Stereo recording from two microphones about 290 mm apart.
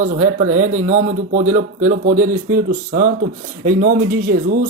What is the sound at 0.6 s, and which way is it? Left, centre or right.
Speech, right.